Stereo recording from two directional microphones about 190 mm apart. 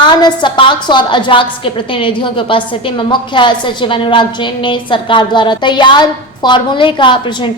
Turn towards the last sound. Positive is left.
turn(degrees=25)  # may be behind; listen again after turning